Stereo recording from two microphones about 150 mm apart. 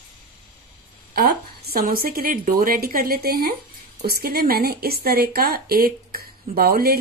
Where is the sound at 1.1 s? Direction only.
90° right.